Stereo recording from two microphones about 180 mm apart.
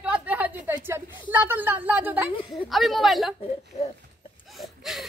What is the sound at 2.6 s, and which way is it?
Speech, centre (ahead or behind).